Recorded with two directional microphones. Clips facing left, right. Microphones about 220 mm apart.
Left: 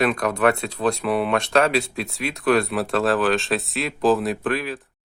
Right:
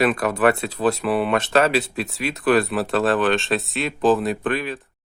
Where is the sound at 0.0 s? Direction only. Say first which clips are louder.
Right 1 dB; 5° right (ahead or behind).